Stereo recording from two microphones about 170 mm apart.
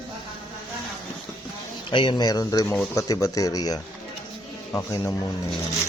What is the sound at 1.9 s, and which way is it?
Speech, 30° left (ahead or behind).